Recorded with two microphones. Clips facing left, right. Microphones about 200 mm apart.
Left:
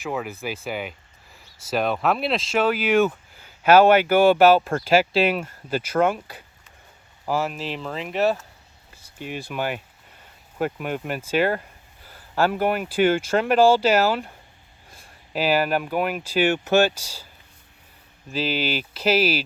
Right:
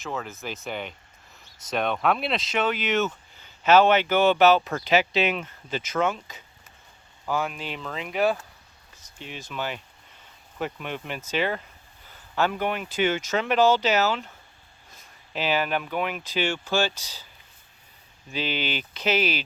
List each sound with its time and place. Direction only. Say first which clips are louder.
0.0 s speech: left 5 dB; 15° left (ahead or behind)
5.7 s speech: left 5 dB; 50° left (ahead or behind)
7.3 s speech: left 3 dB; 5° left (ahead or behind)
9.2 s speech: left 7 dB; 10° left (ahead or behind)
9.6 s speech: left 3 dB; 50° left (ahead or behind)
13.7 s speech: left 4 dB; 10° left (ahead or behind)
14.9 s a sound: left 5 dB; 10° left (ahead or behind)
15.8 s speech: left 4 dB; 10° left (ahead or behind)
16.4 s speech: left 7 dB; 55° left (ahead or behind)
18.3 s speech: left 4 dB; 5° left (ahead or behind)